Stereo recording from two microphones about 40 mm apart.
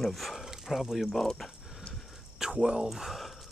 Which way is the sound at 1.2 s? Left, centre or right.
Centre.